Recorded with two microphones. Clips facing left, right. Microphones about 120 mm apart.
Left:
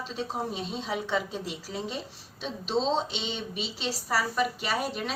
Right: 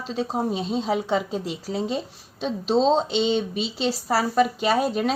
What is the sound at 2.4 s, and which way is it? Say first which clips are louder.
Speech: right 8 dB; 45° right (ahead or behind).